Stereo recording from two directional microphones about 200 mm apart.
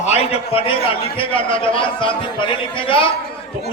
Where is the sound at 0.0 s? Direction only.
30° left (ahead or behind).